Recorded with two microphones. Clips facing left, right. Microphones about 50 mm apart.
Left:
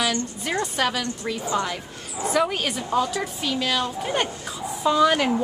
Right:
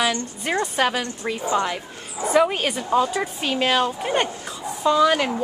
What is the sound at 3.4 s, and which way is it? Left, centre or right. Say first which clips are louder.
Speech: right 5 dB; right.